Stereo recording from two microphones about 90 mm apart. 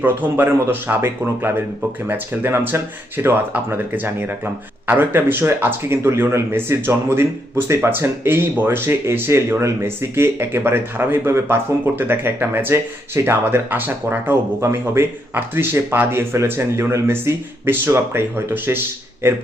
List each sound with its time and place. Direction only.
0.0 s speech: 20° right (ahead or behind)